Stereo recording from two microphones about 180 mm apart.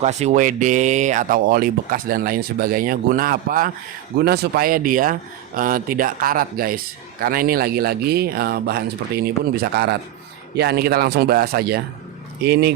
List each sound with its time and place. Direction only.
0.0 s speech: 40° right (ahead or behind); by 12.7 s 65° right (ahead or behind)